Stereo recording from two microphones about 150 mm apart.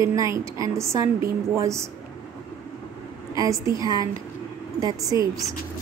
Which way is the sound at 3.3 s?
20° right (ahead or behind).